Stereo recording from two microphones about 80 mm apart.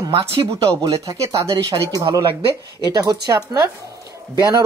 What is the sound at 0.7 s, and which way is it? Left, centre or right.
Speech, right.